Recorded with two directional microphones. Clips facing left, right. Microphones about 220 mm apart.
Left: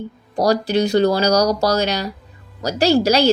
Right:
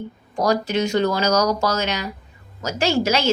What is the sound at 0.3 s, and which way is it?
A woman's voice, 35° left (ahead or behind).